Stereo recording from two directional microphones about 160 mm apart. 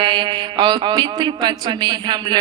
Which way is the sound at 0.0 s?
30° right (ahead or behind).